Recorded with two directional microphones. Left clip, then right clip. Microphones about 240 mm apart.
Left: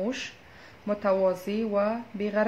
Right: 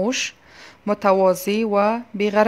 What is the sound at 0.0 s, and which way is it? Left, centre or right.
Speech, right.